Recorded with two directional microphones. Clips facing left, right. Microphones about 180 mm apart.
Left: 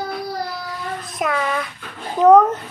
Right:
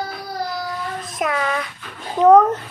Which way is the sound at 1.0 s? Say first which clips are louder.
Left 1 dB; centre (ahead or behind).